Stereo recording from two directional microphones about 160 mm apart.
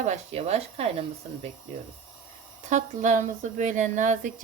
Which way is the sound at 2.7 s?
50° right (ahead or behind).